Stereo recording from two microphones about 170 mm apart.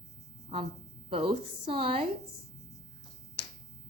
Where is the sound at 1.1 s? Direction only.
35° right (ahead or behind).